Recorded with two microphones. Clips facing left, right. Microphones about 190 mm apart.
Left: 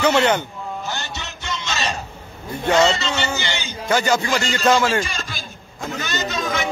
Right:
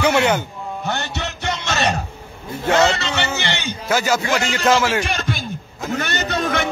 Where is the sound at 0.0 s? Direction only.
10° right (ahead or behind).